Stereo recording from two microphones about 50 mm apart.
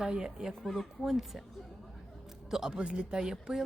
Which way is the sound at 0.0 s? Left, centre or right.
Centre.